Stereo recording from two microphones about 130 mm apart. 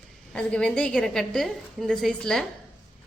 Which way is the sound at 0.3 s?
10° left (ahead or behind).